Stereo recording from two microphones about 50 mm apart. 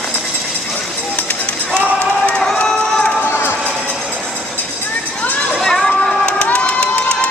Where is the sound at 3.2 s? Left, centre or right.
Left.